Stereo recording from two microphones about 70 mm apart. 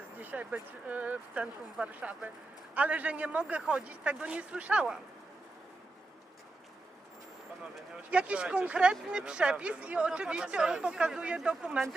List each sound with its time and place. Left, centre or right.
0.2 s speech: right
8.1 s speech: centre